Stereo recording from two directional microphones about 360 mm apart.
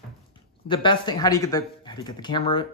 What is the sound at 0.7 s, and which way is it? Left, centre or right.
Speech, centre.